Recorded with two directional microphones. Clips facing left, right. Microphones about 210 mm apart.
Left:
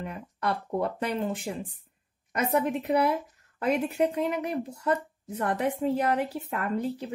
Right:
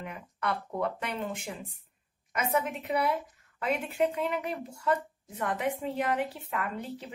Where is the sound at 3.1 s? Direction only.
40° left (ahead or behind).